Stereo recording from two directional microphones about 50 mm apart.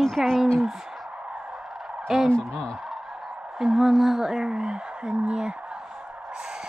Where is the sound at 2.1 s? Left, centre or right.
Centre.